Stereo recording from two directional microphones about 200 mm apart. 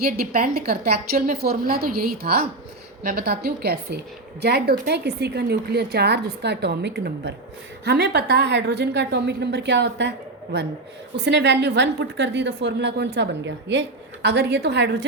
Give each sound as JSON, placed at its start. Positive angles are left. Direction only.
{"t": 0.0, "sound": "a woman's voice", "side_deg": -45}